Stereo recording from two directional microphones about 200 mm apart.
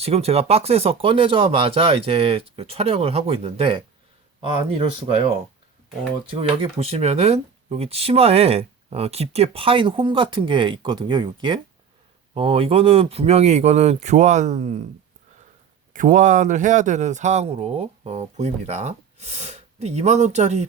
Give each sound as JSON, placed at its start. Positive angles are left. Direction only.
{"t": 0.0, "sound": "speech", "side_deg": -30}
{"t": 6.3, "sound": "speech", "side_deg": -30}
{"t": 15.9, "sound": "speech", "side_deg": -40}